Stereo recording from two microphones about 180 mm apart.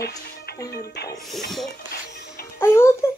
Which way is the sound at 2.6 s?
15° left (ahead or behind).